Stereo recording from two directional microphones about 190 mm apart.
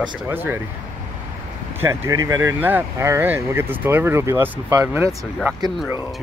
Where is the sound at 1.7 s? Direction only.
15° right (ahead or behind).